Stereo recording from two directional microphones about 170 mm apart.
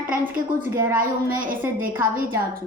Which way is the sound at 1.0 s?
55° right (ahead or behind).